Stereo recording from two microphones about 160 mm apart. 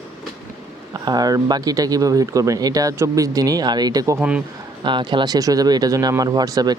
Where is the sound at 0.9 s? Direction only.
25° right (ahead or behind).